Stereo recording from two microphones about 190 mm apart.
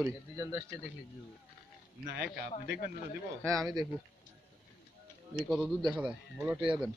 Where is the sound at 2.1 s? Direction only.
60° right (ahead or behind).